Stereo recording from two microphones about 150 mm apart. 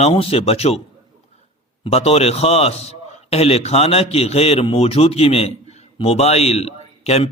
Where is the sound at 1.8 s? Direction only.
40° left (ahead or behind).